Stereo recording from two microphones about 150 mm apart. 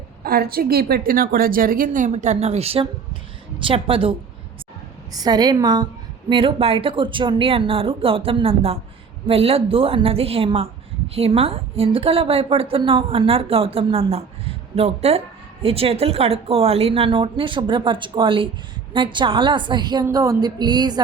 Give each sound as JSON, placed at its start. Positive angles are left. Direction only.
{"t": 0.3, "sound": "a woman's voice", "side_deg": -85}
{"t": 5.1, "sound": "a woman's voice", "side_deg": -25}
{"t": 20.1, "sound": "music", "side_deg": -25}